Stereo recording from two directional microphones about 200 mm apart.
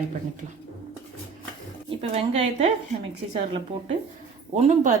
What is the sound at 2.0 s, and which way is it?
A woman's voice, 30° right (ahead or behind).